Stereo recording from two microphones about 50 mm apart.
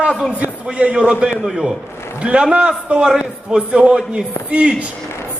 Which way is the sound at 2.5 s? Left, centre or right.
Right.